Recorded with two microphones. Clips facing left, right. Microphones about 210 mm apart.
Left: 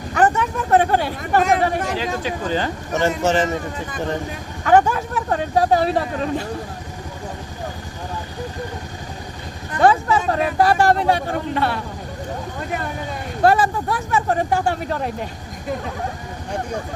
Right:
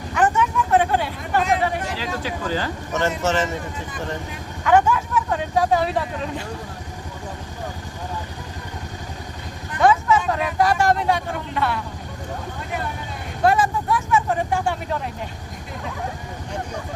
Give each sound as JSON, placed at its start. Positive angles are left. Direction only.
{"t": 0.1, "sound": "a sound", "side_deg": 40}
{"t": 2.2, "sound": "speech", "side_deg": 20}
{"t": 4.6, "sound": "speech", "side_deg": 40}
{"t": 9.8, "sound": "speech", "side_deg": 35}
{"t": 13.4, "sound": "speech", "side_deg": 35}